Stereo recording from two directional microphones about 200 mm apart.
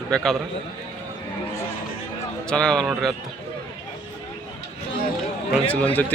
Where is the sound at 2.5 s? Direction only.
5° left (ahead or behind).